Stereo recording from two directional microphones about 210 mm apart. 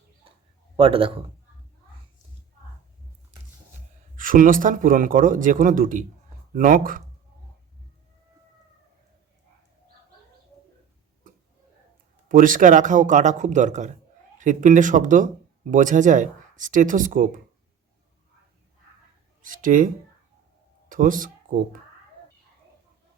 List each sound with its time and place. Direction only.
0.8 s a man's voice: 25° right (ahead or behind)
4.2 s speech: 40° right (ahead or behind)
12.3 s speech: 40° right (ahead or behind)
19.4 s speech: 40° right (ahead or behind)
20.9 s speech: 40° right (ahead or behind)